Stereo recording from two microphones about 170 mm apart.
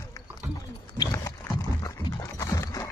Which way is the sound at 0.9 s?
20° left (ahead or behind).